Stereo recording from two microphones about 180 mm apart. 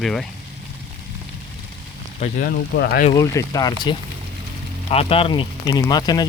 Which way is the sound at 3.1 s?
20° left (ahead or behind).